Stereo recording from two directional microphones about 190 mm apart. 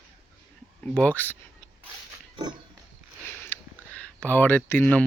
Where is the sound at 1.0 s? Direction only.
10° left (ahead or behind).